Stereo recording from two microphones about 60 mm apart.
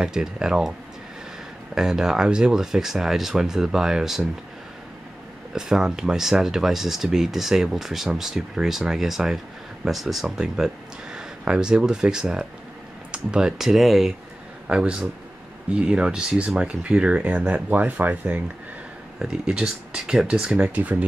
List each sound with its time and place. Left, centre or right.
0.0 s speech: centre
1.8 s speech: centre
5.5 s speech: centre
10.4 s speech: centre
14.7 s speech: centre
19.1 s speech: centre